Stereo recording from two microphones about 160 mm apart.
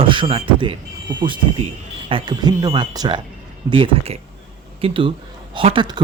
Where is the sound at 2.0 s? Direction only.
30° right (ahead or behind).